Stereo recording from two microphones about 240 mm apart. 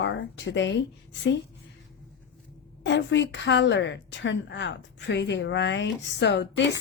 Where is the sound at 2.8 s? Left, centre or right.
Left.